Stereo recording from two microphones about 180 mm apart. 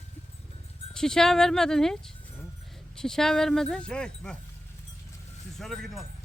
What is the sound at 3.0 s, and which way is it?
Speech, 5° left (ahead or behind).